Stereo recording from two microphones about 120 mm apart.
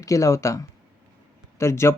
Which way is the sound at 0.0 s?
25° left (ahead or behind).